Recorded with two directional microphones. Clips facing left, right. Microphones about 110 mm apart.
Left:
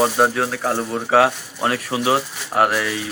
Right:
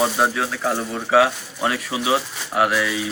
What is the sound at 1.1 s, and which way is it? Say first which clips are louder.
Speech: left 1 dB; 40° left (ahead or behind).